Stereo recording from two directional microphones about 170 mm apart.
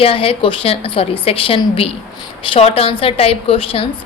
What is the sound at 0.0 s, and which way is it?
A woman's voice, 35° left (ahead or behind).